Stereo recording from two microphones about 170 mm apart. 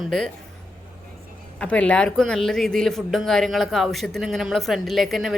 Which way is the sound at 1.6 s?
5° left (ahead or behind).